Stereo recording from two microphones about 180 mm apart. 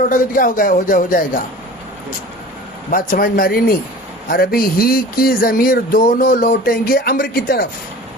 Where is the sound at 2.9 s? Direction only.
50° left (ahead or behind).